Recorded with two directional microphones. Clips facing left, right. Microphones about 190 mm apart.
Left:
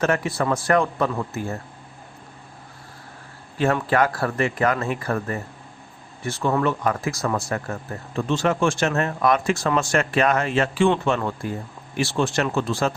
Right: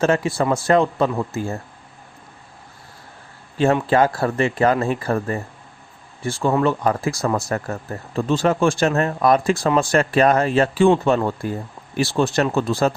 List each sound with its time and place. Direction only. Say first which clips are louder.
0.0 s speech: right 3 dB; 25° right (ahead or behind)
3.6 s speech: right 4 dB; 25° right (ahead or behind)